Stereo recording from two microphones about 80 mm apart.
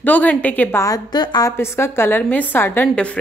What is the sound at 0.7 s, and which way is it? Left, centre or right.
Speech, left.